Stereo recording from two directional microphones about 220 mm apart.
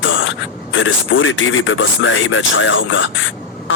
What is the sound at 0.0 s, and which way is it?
Speech, 60° left (ahead or behind).